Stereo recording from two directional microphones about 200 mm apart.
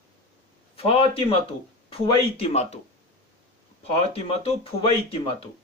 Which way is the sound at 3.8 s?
30° left (ahead or behind).